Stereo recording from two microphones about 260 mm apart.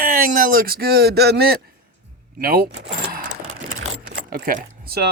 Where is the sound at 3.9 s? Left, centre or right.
Right.